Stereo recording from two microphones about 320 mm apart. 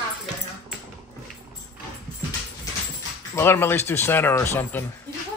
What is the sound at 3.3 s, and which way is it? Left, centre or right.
Speech, centre.